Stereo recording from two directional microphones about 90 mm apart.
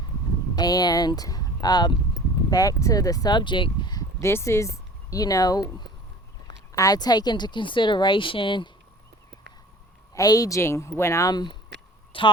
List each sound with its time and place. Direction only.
0.5 s speech: 50° left (ahead or behind)
3.3 s speech: 60° left (ahead or behind)
4.2 s speech: 30° left (ahead or behind)
6.7 s speech: 45° left (ahead or behind); by 8.7 s 65° left (ahead or behind)
10.2 s speech: 40° left (ahead or behind)
10.6 s speech: 30° left (ahead or behind)
11.3 s speech: 50° left (ahead or behind)
12.1 s a woman's voice: 75° left (ahead or behind)